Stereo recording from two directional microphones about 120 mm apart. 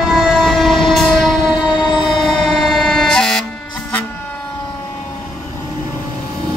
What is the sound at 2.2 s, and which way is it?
Air horn, centre (ahead or behind).